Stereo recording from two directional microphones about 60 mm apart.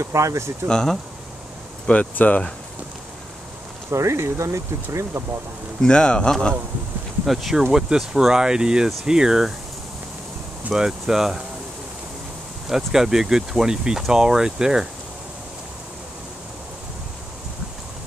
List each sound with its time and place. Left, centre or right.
0.0 s speech: right
0.7 s speech: centre
1.9 s speech: left
3.9 s speech: right
5.8 s speech: centre
7.2 s speech: centre
10.7 s speech: centre
12.6 s speech: centre